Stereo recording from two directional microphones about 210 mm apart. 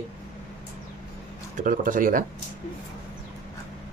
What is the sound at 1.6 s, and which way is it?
Speech, 40° right (ahead or behind).